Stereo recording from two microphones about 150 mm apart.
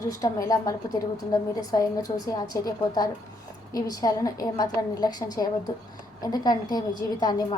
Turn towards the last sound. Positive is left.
turn(degrees=25)  # may be behind; listen again after turning